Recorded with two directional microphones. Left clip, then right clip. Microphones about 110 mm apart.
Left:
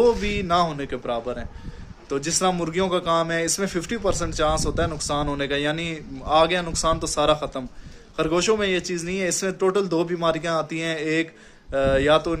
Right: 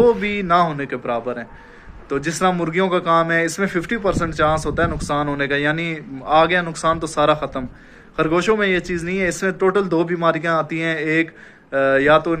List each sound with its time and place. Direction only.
0.0 s a man's voice: 25° left (ahead or behind)